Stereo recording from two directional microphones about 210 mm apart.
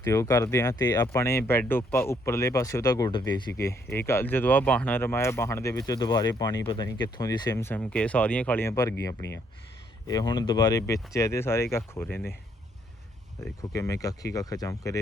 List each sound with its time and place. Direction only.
0.0 s speech: 15° left (ahead or behind)
13.4 s speech: 15° left (ahead or behind)